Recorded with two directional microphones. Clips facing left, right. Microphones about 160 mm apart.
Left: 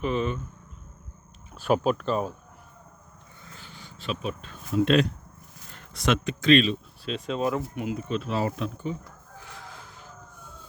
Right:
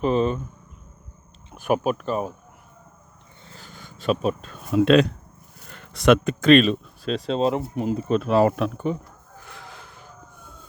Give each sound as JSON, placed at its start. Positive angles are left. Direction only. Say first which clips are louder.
{"t": 0.0, "sound": "speech", "louder": "right 6 dB", "side_deg": -35}
{"t": 1.5, "sound": "speech", "louder": "right 1 dB", "side_deg": -15}
{"t": 3.4, "sound": "a sound", "louder": "right 3 dB", "side_deg": -35}
{"t": 5.7, "sound": "a sound", "louder": "right 9 dB", "side_deg": -70}
{"t": 6.2, "sound": "speech", "louder": "right 5 dB", "side_deg": -50}
{"t": 8.2, "sound": "speech", "louder": "right 9 dB", "side_deg": -60}
{"t": 9.4, "sound": "vehicle", "louder": "right 2 dB", "side_deg": -65}